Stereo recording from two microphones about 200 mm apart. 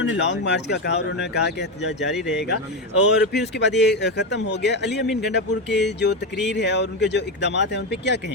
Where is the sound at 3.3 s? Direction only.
60° left (ahead or behind).